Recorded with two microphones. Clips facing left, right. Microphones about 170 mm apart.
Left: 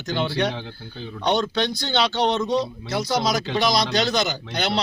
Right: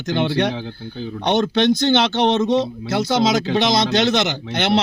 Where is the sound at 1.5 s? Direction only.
20° right (ahead or behind).